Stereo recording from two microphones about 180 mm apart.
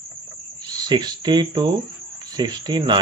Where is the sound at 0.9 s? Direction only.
25° right (ahead or behind).